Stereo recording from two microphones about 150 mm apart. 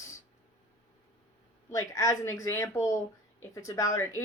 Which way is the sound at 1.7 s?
20° left (ahead or behind).